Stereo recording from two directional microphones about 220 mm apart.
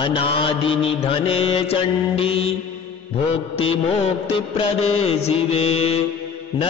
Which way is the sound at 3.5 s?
25° left (ahead or behind).